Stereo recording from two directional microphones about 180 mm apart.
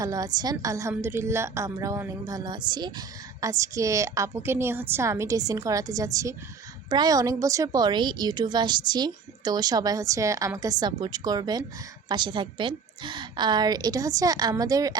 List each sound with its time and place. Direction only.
0.0 s a woman's voice: 20° right (ahead or behind)